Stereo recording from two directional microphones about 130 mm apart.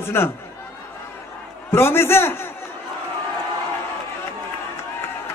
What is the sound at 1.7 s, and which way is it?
Speech, 20° left (ahead or behind).